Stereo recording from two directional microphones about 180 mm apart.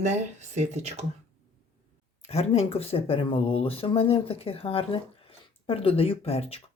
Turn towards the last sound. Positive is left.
turn(degrees=35)  # may be behind; listen again after turning